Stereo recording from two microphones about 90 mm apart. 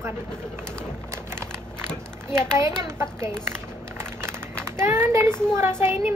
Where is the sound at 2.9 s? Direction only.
30° right (ahead or behind).